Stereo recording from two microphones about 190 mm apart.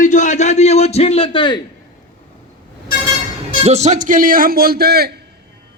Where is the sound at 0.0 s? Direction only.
40° left (ahead or behind); by 1.6 s 25° left (ahead or behind).